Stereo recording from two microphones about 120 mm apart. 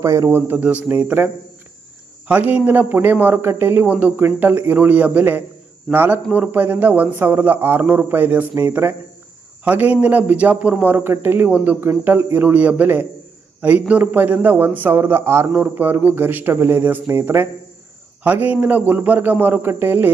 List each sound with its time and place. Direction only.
0.0 s a man's voice: 25° right (ahead or behind)